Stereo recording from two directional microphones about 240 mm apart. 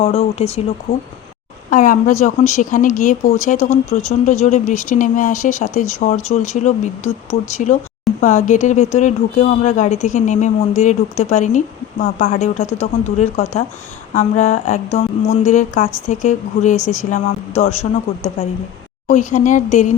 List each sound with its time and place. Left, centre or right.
0.0 s speech: left
0.9 s a woman's voice: left
19.0 s speech: left